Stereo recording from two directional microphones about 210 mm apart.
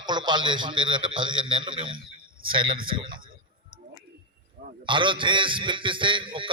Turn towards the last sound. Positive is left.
turn(degrees=-25)  # may be behind; listen again after turning